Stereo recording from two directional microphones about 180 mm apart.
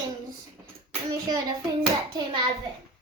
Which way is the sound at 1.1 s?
20° right (ahead or behind).